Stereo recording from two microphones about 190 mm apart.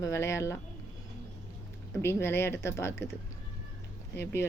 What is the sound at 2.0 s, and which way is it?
A woman's voice, 15° left (ahead or behind).